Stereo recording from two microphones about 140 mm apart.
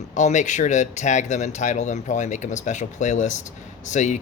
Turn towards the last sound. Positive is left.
turn(degrees=60)  # may be behind; listen again after turning